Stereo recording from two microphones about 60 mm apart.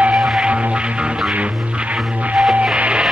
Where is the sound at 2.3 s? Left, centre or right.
Centre.